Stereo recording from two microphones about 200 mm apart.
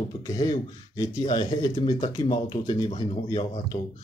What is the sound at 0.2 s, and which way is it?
Speech, 20° left (ahead or behind).